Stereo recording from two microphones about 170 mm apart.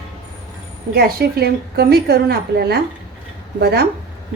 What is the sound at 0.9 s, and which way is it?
A woman's voice, 65° right (ahead or behind).